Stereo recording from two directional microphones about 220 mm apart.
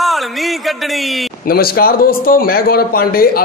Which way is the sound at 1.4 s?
45° left (ahead or behind).